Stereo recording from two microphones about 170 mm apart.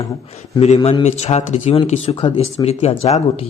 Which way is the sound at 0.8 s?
25° left (ahead or behind).